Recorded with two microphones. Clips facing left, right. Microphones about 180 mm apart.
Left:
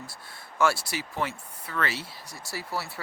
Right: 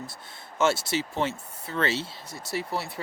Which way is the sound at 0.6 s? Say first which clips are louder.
Right 2 dB; 25° right (ahead or behind).